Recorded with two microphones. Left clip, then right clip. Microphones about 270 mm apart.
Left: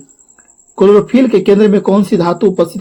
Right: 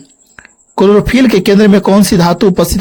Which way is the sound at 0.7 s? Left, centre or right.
Right.